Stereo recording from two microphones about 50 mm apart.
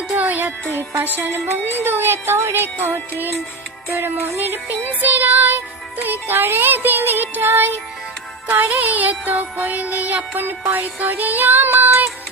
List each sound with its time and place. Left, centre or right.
0.2 s music: right
0.7 s music: right
1.3 s music: right
1.8 s music: right
8.4 s music: right